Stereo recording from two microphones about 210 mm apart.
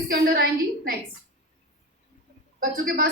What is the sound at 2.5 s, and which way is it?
Speech, 45° right (ahead or behind).